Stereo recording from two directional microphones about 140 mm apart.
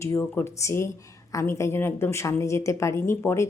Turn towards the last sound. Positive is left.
turn(degrees=20)  # may be behind; listen again after turning